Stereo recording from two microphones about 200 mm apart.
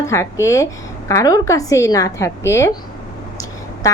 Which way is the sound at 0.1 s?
15° left (ahead or behind).